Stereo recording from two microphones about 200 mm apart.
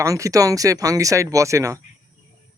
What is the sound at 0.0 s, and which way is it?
Speech, 15° right (ahead or behind).